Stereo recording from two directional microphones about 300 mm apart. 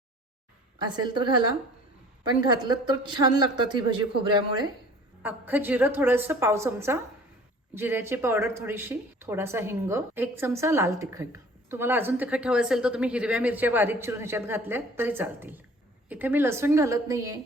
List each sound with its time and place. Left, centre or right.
0.8 s speech: centre
2.4 s speech: centre